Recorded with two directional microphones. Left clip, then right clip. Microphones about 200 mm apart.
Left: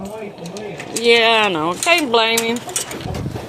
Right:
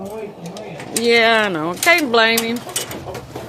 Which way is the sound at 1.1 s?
20° right (ahead or behind).